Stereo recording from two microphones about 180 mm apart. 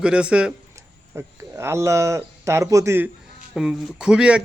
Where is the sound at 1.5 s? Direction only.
15° right (ahead or behind).